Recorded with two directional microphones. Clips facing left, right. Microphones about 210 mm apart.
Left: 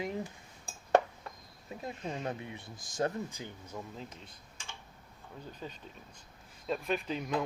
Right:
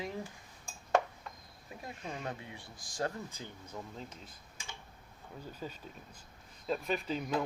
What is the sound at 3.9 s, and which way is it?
Cutlery, centre (ahead or behind).